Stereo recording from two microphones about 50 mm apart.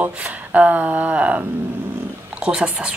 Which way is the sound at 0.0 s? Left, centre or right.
Right.